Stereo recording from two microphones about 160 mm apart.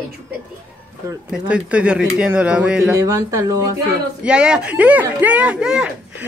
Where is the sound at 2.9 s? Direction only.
20° right (ahead or behind).